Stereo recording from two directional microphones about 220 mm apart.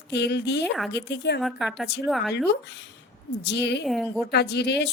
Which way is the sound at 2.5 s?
55° left (ahead or behind).